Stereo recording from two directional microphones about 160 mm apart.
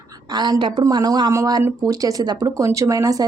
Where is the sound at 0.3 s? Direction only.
25° right (ahead or behind).